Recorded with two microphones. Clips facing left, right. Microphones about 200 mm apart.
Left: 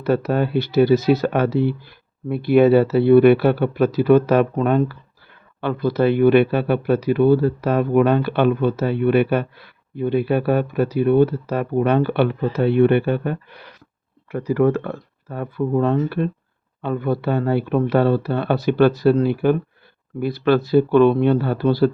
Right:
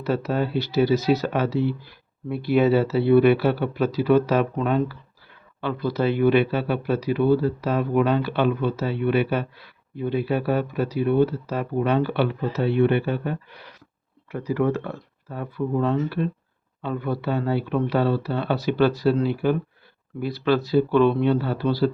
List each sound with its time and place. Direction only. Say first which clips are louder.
0.0 s speech: left 5 dB; 55° left (ahead or behind)